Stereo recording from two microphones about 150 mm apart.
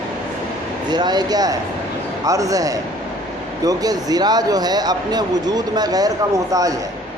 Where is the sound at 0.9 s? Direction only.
30° right (ahead or behind).